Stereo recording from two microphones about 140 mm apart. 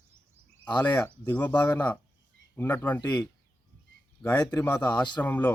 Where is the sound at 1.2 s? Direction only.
10° left (ahead or behind).